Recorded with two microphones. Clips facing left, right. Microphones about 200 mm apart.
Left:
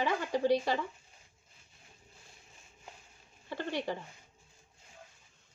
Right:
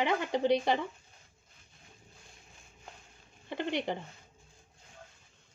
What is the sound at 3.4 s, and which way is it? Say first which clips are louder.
Speech: right 2 dB; 20° right (ahead or behind).